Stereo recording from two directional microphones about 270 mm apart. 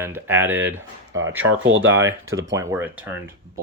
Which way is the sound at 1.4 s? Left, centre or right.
Right.